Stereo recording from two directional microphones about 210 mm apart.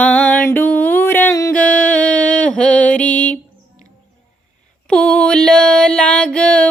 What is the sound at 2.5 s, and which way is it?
Mantra, 5° left (ahead or behind).